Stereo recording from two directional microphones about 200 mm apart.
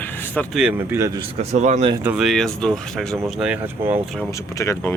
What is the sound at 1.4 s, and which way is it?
Speech, 35° right (ahead or behind).